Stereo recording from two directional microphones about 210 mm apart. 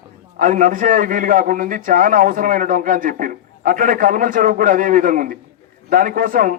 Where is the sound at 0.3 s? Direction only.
35° right (ahead or behind).